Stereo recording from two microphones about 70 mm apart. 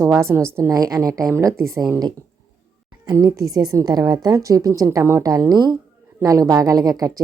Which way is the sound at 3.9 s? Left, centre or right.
Right.